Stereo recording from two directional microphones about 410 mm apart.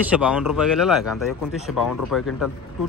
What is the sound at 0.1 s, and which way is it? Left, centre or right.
Speech, centre.